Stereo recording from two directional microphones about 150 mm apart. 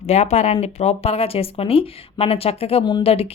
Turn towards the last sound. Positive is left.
turn(degrees=40)  # may be behind; listen again after turning